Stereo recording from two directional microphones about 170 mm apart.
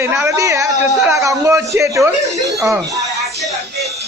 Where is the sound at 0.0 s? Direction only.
15° right (ahead or behind).